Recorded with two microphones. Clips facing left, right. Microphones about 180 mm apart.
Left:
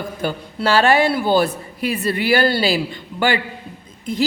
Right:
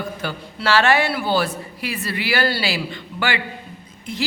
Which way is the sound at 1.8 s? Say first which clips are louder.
Left 8 dB; 45° left (ahead or behind).